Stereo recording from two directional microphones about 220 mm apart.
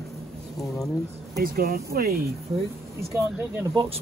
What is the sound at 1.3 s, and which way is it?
Speech, 45° right (ahead or behind).